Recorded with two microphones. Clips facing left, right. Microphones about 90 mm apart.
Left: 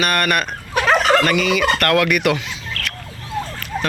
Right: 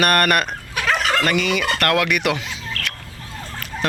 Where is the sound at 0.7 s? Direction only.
40° left (ahead or behind).